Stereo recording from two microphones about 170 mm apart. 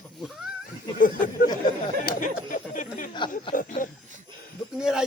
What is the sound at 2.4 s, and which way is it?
Speech, 50° left (ahead or behind).